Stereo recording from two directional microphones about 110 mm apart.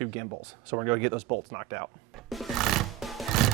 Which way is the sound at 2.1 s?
Centre (ahead or behind).